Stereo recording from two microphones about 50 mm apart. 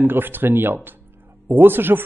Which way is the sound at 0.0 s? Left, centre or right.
Right.